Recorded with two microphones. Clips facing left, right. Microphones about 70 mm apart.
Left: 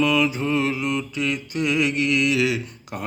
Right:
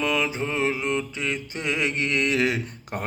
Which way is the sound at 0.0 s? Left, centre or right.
Right.